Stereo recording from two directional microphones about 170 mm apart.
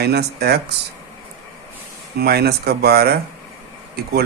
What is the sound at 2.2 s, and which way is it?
Speech, 70° right (ahead or behind).